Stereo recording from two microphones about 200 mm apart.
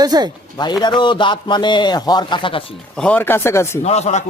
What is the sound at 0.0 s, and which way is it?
Speech, 20° right (ahead or behind).